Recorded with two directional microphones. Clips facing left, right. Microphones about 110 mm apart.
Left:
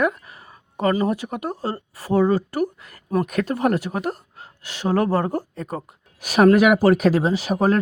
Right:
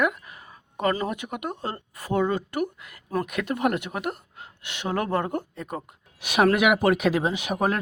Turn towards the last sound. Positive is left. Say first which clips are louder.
# left 5 dB
turn(degrees=35)  # may be behind; listen again after turning